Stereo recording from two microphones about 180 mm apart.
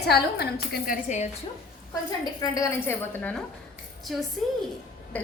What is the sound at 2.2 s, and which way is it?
A woman's voice, 20° left (ahead or behind).